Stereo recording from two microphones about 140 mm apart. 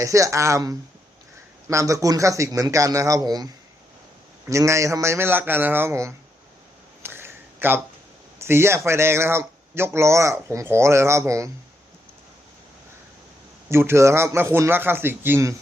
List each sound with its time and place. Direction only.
0.0 s speech: 20° right (ahead or behind)
7.0 s a sound: 15° right (ahead or behind)
8.4 s speech: 15° right (ahead or behind)
13.7 s a man's voice: 20° right (ahead or behind)